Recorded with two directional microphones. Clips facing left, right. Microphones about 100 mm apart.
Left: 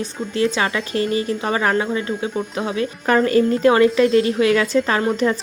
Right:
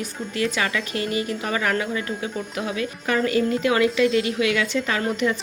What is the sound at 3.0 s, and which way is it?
A woman's voice, 40° left (ahead or behind).